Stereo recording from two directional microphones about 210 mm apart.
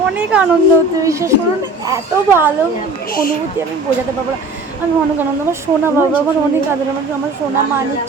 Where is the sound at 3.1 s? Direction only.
45° left (ahead or behind).